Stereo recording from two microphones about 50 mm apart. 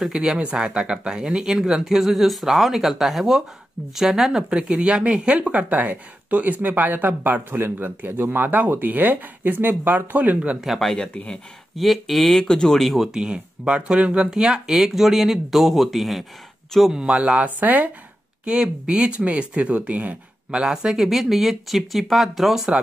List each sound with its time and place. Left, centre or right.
0.0 s speech: centre
4.4 s speech: centre
10.6 s speech: centre
11.0 s speech: left
11.7 s speech: centre
13.1 s speech: centre
14.3 s speech: centre
16.9 s speech: centre; by 17.9 s right
18.4 s speech: right
20.6 s speech: centre